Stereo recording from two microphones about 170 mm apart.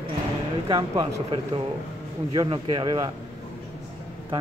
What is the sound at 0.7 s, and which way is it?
A man's voice, 25° right (ahead or behind).